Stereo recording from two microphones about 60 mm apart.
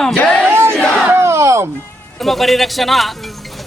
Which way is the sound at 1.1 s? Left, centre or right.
Right.